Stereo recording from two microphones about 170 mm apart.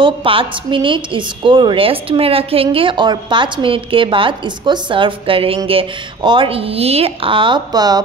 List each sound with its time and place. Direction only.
0.0 s a woman's voice: 30° right (ahead or behind)